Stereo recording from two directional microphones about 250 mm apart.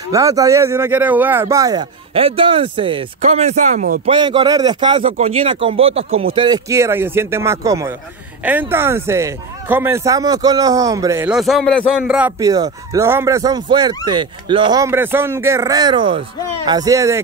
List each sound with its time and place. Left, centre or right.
0.1 s speech: centre; by 4.1 s right
4.1 s speech: centre